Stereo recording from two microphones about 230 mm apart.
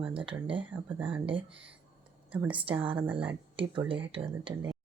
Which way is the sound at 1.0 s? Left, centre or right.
Right.